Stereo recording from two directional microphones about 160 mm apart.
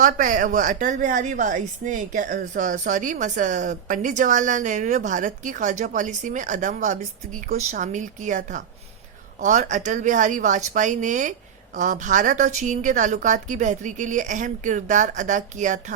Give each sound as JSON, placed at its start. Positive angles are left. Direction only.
{"t": 0.0, "sound": "a woman's voice", "side_deg": -55}